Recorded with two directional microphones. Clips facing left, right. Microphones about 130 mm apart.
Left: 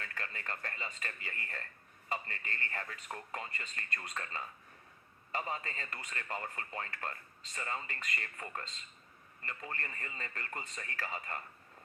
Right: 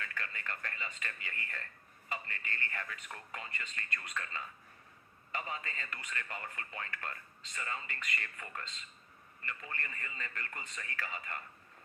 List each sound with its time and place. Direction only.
0.0 s speech: 35° left (ahead or behind)